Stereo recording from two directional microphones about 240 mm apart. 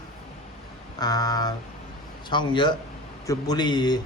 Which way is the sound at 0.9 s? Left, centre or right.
Centre.